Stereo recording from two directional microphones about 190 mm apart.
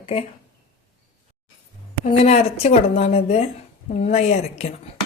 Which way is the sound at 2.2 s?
35° left (ahead or behind).